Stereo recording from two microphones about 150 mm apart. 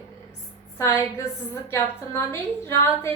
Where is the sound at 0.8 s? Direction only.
20° left (ahead or behind).